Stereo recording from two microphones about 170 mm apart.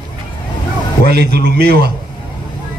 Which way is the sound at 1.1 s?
75° right (ahead or behind).